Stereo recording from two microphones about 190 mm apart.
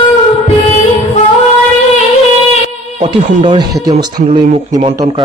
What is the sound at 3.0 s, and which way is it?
Speech, 25° right (ahead or behind).